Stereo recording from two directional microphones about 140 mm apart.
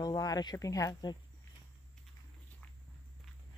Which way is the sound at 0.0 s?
25° left (ahead or behind).